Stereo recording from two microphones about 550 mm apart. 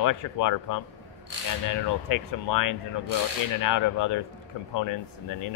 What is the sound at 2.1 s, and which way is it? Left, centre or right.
Speech, left.